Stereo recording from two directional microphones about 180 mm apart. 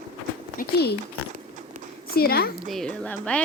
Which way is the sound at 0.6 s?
65° left (ahead or behind).